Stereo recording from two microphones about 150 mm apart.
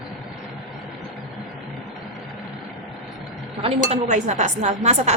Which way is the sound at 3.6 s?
45° right (ahead or behind).